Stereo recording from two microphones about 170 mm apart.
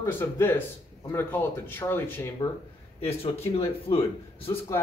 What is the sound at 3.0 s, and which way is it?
A man's voice, 35° left (ahead or behind).